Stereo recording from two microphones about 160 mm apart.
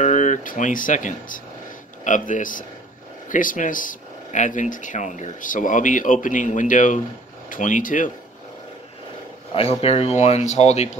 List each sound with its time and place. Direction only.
0.0 s speech: 50° left (ahead or behind)
9.5 s speech: 35° left (ahead or behind)